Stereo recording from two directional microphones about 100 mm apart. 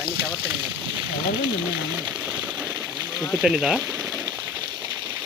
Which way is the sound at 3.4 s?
5° right (ahead or behind).